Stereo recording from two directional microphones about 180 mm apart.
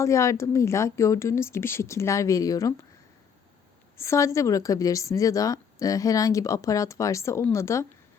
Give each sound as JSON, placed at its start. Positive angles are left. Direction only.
{"t": 0.0, "sound": "a woman's voice", "side_deg": 15}
{"t": 3.9, "sound": "a woman's voice", "side_deg": 15}